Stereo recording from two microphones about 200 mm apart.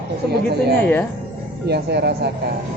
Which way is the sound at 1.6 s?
55° right (ahead or behind).